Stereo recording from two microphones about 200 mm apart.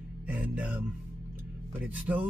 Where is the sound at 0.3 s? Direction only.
5° right (ahead or behind).